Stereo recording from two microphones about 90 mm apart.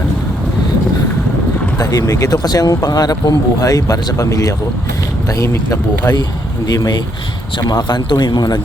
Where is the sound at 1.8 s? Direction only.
45° left (ahead or behind).